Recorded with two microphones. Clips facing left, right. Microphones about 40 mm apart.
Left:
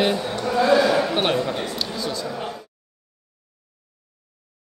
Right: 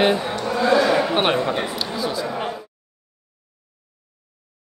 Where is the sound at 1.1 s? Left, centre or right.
Right.